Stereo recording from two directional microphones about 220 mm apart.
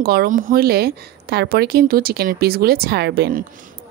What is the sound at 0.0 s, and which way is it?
A woman's voice, 45° right (ahead or behind).